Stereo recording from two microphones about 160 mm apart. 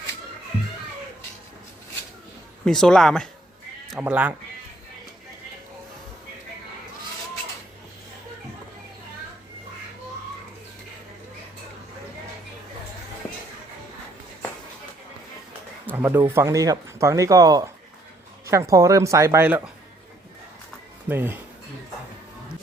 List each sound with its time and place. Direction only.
2.6 s speech: 5° left (ahead or behind)
4.0 s speech: 10° right (ahead or behind)
15.9 s speech: 15° right (ahead or behind)
21.1 s speech: 15° right (ahead or behind)